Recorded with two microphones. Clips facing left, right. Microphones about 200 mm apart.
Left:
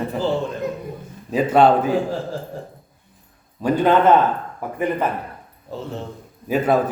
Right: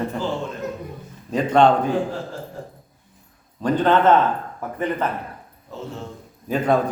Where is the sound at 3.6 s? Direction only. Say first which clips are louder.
Left 2 dB; 10° left (ahead or behind).